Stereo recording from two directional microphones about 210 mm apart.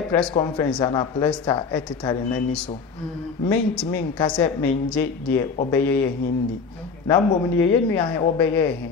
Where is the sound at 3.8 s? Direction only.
20° left (ahead or behind).